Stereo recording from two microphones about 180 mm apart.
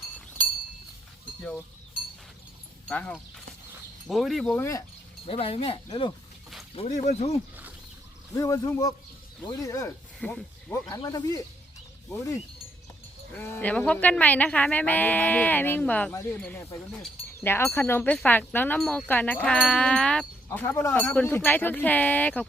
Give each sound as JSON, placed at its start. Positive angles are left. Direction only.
{"t": 2.9, "sound": "wind chime", "side_deg": 5}
{"t": 4.0, "sound": "speech", "side_deg": 0}
{"t": 4.5, "sound": "wind chime", "side_deg": 15}
{"t": 5.2, "sound": "speech", "side_deg": 30}
{"t": 6.7, "sound": "speech", "side_deg": 40}
{"t": 8.4, "sound": "wind chime", "side_deg": 15}
{"t": 10.2, "sound": "speech", "side_deg": 5}
{"t": 10.8, "sound": "speech", "side_deg": 20}
{"t": 12.1, "sound": "wind chime", "side_deg": 15}